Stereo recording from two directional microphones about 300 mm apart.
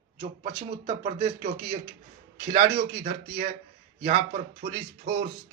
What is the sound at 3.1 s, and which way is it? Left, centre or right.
Speech, right.